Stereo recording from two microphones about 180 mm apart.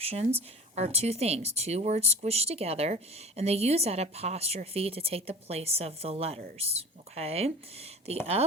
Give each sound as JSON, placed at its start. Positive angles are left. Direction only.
{"t": 0.0, "sound": "speech", "side_deg": -35}